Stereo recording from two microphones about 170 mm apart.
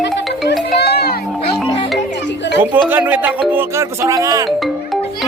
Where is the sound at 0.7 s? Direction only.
75° left (ahead or behind).